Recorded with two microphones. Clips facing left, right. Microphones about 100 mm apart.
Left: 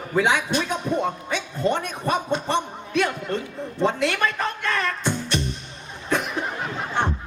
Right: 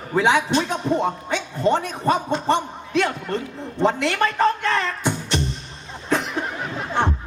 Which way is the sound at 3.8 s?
30° right (ahead or behind).